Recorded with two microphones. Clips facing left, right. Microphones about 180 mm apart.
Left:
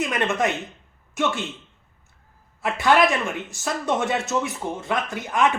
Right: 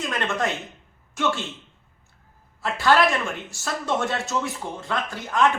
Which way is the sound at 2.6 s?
20° left (ahead or behind).